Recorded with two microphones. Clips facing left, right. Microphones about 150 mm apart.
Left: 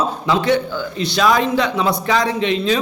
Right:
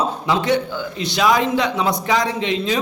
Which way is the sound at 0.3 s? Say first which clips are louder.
Left 2 dB; 20° right (ahead or behind).